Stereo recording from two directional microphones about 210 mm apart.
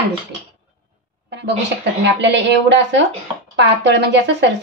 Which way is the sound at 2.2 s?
55° right (ahead or behind).